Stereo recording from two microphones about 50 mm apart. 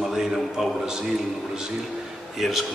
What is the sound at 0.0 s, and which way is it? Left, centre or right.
A man's voice, centre.